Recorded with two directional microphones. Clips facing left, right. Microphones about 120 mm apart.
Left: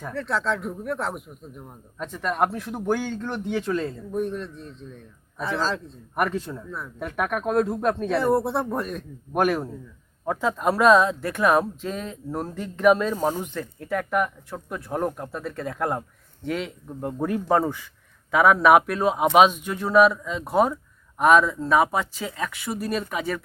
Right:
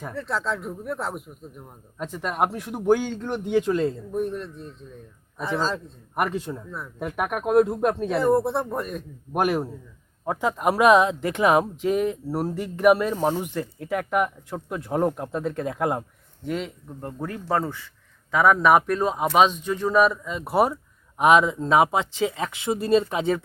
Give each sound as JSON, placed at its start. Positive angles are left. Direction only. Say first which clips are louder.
{"t": 0.1, "sound": "speech", "louder": "left 2 dB", "side_deg": 0}
{"t": 2.0, "sound": "speech", "louder": "left 1 dB", "side_deg": -10}
{"t": 4.1, "sound": "speech", "louder": "even", "side_deg": 0}
{"t": 6.1, "sound": "speech", "louder": "even", "side_deg": -15}
{"t": 6.7, "sound": "speech", "louder": "right 1 dB", "side_deg": -5}
{"t": 8.1, "sound": "speech", "louder": "right 1 dB", "side_deg": 0}
{"t": 16.5, "sound": "speech", "louder": "even", "side_deg": 0}
{"t": 17.0, "sound": "speech", "louder": "left 6 dB", "side_deg": 15}